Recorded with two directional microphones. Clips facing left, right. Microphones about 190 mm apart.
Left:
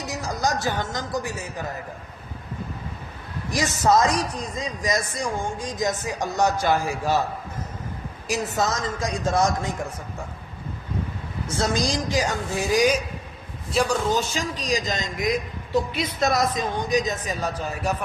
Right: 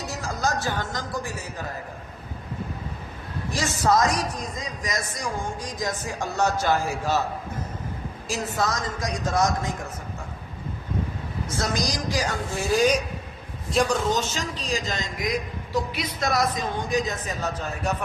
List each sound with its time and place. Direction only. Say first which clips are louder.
0.0 s a woman's voice: left 2 dB; 20° left (ahead or behind)
3.5 s a man's voice: left 2 dB; 20° left (ahead or behind)
8.3 s a man's voice: left 2 dB; 25° left (ahead or behind)
11.5 s a man's voice: left 4 dB; 25° left (ahead or behind)